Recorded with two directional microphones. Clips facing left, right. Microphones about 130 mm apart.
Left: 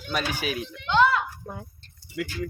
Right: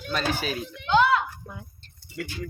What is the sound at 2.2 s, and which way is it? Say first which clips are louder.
Speech: left 3 dB; 90° left.